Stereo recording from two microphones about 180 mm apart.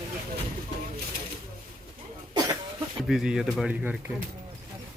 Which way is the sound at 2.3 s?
20° right (ahead or behind).